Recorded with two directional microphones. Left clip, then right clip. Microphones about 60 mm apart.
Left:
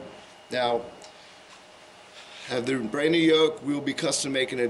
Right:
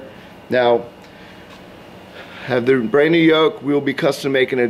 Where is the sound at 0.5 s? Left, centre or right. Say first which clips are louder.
Right 11 dB; right.